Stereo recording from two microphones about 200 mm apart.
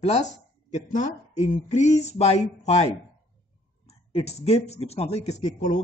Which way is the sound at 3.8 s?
30° left (ahead or behind).